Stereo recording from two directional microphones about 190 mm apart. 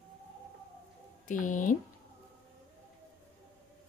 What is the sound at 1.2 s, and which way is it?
Speech, 45° left (ahead or behind).